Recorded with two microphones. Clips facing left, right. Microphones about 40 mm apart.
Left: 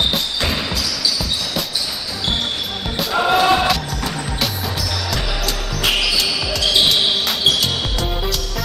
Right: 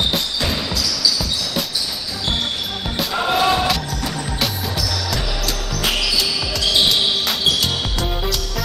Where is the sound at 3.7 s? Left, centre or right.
Centre.